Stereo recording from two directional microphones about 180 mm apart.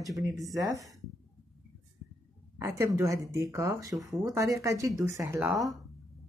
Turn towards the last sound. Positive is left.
turn(degrees=-15)  # may be behind; listen again after turning